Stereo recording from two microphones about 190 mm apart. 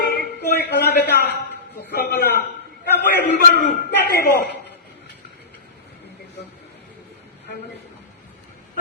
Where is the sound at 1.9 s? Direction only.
60° left (ahead or behind).